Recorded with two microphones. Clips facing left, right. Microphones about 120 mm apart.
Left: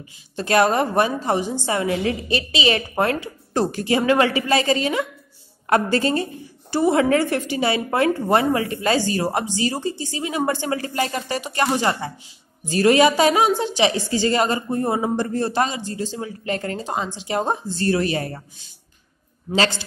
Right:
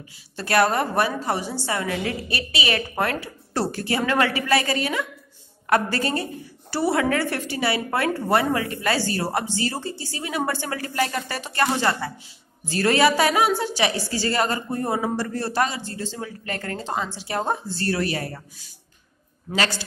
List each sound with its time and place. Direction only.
0.4 s a woman's voice: 20° left (ahead or behind)